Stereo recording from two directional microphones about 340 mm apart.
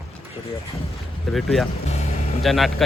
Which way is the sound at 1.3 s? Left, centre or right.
Centre.